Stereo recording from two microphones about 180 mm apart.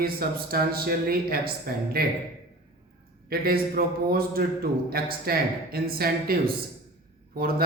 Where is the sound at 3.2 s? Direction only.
55° right (ahead or behind).